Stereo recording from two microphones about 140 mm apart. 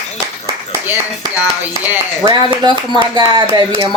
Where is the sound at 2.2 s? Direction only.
35° right (ahead or behind).